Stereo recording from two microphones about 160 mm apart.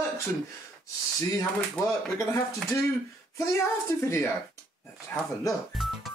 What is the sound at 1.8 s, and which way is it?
Speech, 20° left (ahead or behind).